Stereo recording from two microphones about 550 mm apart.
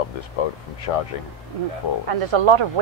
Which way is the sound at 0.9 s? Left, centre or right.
Left.